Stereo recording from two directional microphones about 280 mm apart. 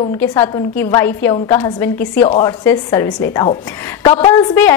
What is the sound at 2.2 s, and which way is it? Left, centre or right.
A woman's voice, centre.